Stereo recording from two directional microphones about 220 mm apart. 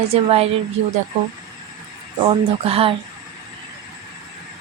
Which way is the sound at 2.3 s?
25° right (ahead or behind).